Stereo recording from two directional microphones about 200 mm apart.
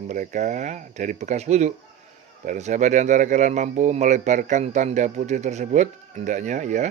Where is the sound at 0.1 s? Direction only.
40° right (ahead or behind).